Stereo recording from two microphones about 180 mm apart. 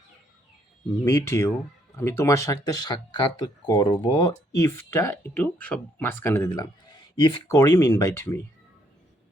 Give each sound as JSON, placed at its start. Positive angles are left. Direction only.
{"t": 1.0, "sound": "speech", "side_deg": 15}
{"t": 6.5, "sound": "speech", "side_deg": 25}